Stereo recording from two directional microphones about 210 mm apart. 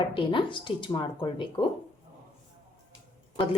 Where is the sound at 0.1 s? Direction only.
25° left (ahead or behind).